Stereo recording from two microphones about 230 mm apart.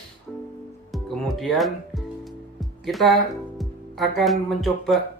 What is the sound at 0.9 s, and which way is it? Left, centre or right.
Music, centre.